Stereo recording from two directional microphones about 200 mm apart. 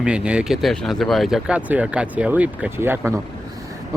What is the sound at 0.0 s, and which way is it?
Speech, 5° right (ahead or behind).